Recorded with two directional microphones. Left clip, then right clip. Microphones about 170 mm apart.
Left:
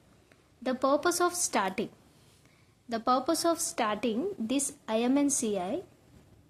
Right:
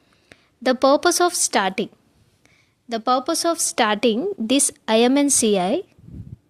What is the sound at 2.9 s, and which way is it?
A woman's voice, 25° right (ahead or behind).